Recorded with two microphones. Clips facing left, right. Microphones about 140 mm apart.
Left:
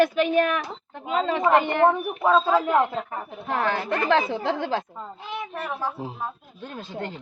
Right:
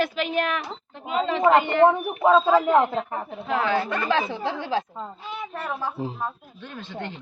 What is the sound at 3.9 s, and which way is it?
Speech, 65° left (ahead or behind).